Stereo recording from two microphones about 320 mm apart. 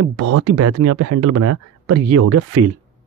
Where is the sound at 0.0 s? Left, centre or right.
Right.